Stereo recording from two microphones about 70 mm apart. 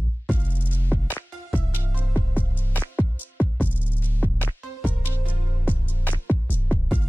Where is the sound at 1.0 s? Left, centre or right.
Left.